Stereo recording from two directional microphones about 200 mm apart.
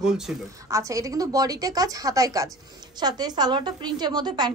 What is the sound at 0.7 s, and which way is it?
A woman's voice, 15° right (ahead or behind).